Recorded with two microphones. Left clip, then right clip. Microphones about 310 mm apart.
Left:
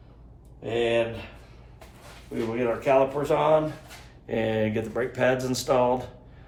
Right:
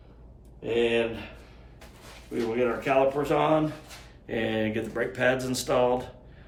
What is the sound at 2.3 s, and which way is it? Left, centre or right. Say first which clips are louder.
Speech: even; centre.